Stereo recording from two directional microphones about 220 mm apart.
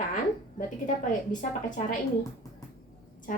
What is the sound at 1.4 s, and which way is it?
Speech, 35° left (ahead or behind).